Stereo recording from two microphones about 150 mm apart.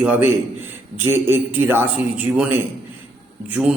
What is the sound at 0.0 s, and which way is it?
A man's voice, 10° right (ahead or behind).